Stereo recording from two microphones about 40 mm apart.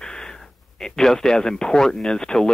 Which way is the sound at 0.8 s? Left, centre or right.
Centre.